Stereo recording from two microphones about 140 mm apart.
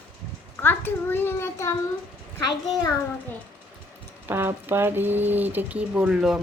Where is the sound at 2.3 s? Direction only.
30° left (ahead or behind).